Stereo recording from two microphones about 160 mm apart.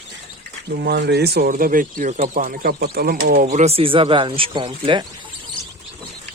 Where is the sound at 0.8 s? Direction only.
90° right; by 5.0 s 30° right (ahead or behind).